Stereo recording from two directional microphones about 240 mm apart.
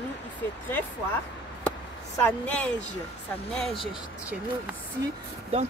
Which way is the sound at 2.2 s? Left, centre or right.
Centre.